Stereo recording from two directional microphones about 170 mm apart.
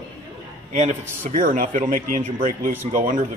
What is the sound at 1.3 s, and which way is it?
Speech, 50° right (ahead or behind).